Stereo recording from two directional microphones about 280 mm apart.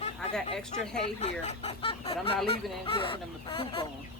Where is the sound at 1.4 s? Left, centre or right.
Left.